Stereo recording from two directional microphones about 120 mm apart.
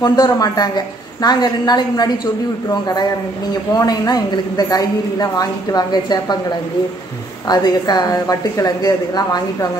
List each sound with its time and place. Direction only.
0.0 s a woman's voice: 35° left (ahead or behind)
7.4 s a woman's voice: 35° left (ahead or behind)